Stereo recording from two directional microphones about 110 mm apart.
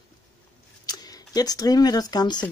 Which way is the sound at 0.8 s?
35° left (ahead or behind).